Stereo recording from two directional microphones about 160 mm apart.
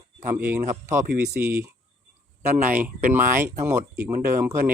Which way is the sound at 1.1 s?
80° right.